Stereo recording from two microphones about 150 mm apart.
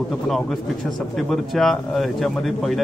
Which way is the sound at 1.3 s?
Centre (ahead or behind).